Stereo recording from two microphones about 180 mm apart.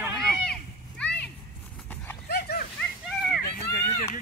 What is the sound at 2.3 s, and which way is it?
Dog, 60° left (ahead or behind).